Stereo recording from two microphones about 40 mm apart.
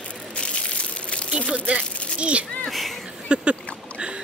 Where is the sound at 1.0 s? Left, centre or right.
Left.